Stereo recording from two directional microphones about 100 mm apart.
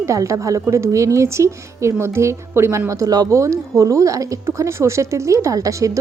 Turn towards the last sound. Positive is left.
turn(degrees=-35)  # may be behind; listen again after turning